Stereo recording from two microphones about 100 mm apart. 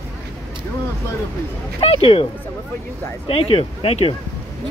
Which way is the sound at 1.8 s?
65° left (ahead or behind).